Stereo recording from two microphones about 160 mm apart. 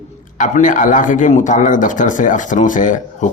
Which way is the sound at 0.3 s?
55° left (ahead or behind).